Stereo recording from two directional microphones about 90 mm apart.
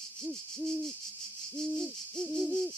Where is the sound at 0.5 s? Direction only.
5° left (ahead or behind).